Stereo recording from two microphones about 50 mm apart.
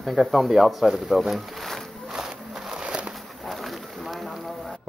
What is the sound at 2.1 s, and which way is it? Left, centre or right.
Battle cry, centre.